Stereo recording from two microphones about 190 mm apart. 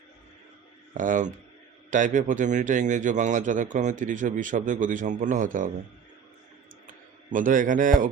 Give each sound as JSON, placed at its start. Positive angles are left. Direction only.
{"t": 0.9, "sound": "a man's voice", "side_deg": -40}
{"t": 7.3, "sound": "a man's voice", "side_deg": -45}